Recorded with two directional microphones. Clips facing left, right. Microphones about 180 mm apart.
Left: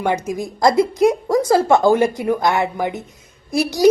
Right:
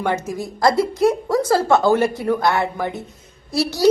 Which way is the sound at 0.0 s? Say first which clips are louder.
Left 2 dB; 15° left (ahead or behind).